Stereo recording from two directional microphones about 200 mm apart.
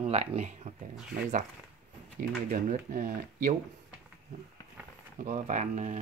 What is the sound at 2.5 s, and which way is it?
Speech, 40° right (ahead or behind).